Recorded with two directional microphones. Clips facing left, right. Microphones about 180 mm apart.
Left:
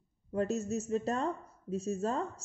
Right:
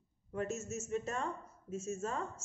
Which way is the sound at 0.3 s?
35° left (ahead or behind).